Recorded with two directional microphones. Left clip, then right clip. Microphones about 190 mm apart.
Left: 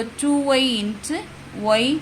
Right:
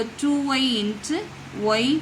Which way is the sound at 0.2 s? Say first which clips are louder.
Left 5 dB; 30° left (ahead or behind).